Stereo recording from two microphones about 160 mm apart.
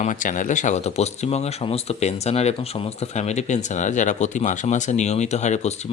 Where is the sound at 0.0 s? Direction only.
55° left (ahead or behind).